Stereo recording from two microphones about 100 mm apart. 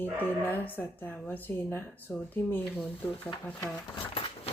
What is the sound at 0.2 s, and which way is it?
A woman's voice, 20° left (ahead or behind).